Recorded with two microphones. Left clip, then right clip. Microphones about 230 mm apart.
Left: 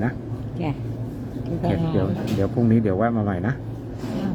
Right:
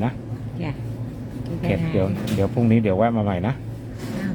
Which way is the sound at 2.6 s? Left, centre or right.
Right.